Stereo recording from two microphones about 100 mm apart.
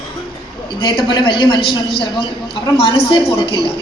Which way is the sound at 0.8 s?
55° left (ahead or behind).